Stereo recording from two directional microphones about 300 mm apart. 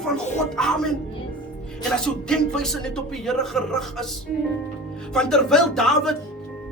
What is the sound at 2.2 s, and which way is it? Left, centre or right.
Speech, centre.